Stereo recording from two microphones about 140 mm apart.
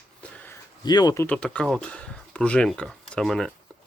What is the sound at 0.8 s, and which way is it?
Speech, 30° left (ahead or behind).